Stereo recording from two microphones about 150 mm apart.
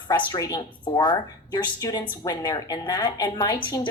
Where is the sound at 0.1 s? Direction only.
25° left (ahead or behind).